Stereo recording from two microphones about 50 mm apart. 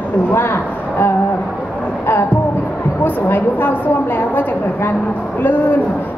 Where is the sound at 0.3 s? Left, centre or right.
Left.